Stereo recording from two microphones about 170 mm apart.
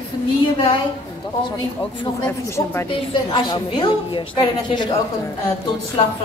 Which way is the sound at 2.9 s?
30° left (ahead or behind).